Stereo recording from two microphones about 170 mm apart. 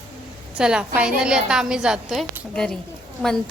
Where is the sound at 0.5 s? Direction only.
5° right (ahead or behind).